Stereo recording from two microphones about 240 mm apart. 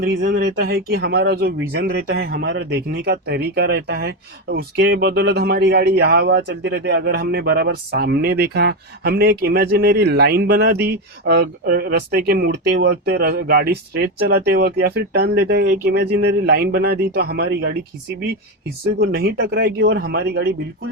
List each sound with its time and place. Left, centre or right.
0.0 s speech: right
18.9 s speech: right